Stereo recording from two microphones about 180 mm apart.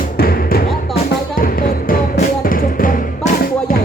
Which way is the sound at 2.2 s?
50° left (ahead or behind).